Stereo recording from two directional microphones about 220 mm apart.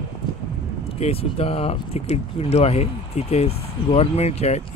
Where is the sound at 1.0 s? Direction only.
25° left (ahead or behind).